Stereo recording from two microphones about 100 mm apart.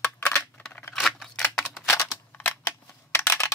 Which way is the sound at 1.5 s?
5° left (ahead or behind).